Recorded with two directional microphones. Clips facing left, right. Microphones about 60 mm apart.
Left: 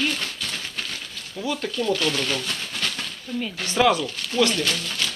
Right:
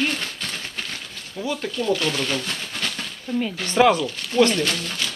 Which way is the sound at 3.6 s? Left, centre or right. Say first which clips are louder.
Right 2 dB; right.